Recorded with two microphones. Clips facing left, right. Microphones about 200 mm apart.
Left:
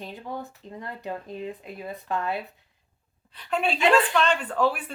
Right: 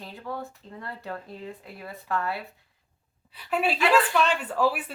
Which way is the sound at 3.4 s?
5° right (ahead or behind).